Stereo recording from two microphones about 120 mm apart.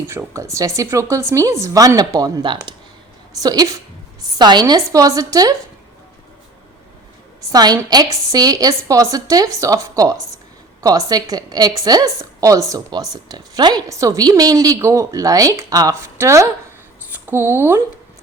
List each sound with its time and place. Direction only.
0.1 s a woman's voice: 25° right (ahead or behind)
7.5 s a woman's voice: 35° right (ahead or behind)